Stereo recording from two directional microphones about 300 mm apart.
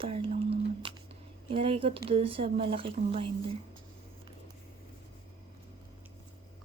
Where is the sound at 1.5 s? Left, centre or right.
Centre.